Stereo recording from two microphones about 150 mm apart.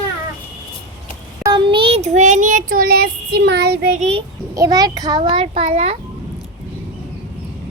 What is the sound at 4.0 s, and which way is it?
Speech, 40° right (ahead or behind).